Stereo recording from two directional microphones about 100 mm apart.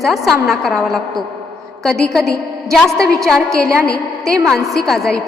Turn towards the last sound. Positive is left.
turn(degrees=5)  # may be behind; listen again after turning